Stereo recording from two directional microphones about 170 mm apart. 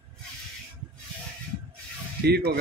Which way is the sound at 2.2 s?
70° right (ahead or behind).